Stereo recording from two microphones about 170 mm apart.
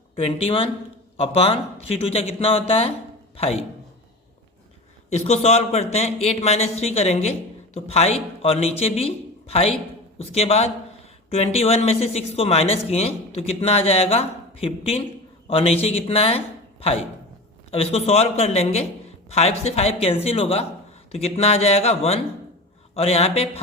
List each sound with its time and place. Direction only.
0.2 s speech: 35° left (ahead or behind)
5.0 s speech: 40° left (ahead or behind)
17.7 s speech: 35° left (ahead or behind)